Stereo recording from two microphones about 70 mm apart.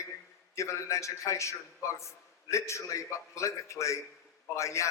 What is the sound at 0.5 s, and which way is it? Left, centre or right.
A man's voice, left.